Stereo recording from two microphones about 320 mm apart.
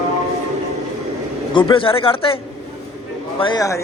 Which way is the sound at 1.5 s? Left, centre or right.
Centre.